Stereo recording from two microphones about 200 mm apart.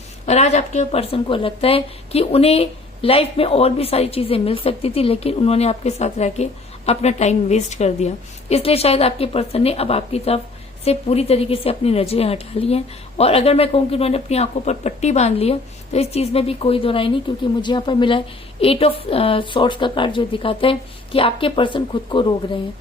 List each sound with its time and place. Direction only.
0.3 s a woman's voice: 35° left (ahead or behind)